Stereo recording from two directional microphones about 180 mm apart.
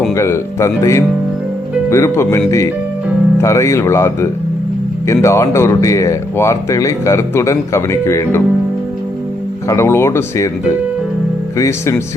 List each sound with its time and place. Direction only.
0.1 s speech: 15° left (ahead or behind)
9.6 s speech: 15° left (ahead or behind)
11.5 s speech: 15° left (ahead or behind)